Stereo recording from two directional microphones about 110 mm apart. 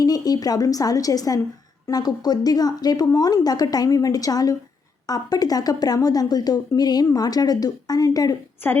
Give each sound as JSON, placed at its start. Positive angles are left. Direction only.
{"t": 0.0, "sound": "speech", "side_deg": 35}
{"t": 8.6, "sound": "a woman's voice", "side_deg": 20}